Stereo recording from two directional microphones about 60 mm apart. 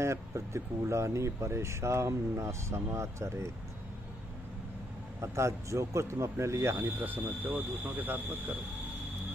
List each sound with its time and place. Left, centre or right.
0.0 s speech: right
5.2 s speech: right
7.0 s speech: right